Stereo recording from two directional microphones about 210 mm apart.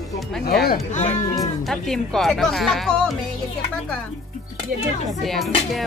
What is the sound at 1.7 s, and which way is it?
Speech, centre (ahead or behind).